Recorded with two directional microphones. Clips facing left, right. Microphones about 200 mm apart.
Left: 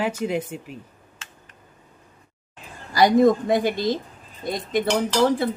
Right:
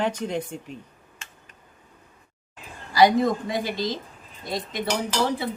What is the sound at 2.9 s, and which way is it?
A woman's voice, 50° left (ahead or behind).